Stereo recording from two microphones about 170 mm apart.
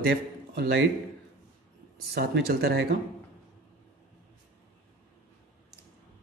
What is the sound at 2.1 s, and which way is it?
Speech, 65° right (ahead or behind).